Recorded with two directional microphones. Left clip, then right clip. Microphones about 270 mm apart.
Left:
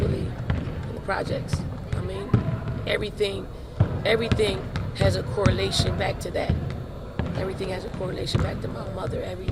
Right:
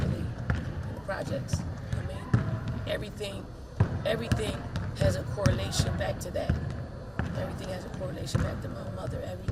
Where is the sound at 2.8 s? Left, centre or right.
Left.